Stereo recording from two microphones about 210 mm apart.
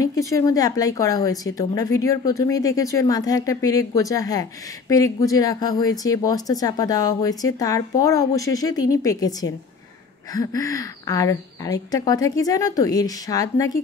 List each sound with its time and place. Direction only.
0.0 s speech: 15° left (ahead or behind)